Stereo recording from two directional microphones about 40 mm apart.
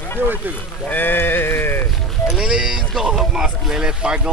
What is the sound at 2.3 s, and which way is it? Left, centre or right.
Speech, centre.